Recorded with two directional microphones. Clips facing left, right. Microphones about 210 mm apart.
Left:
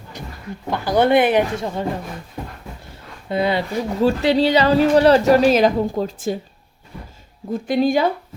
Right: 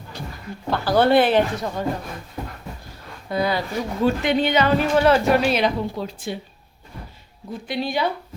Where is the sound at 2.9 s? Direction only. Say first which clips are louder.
Left 3 dB; 25° left (ahead or behind).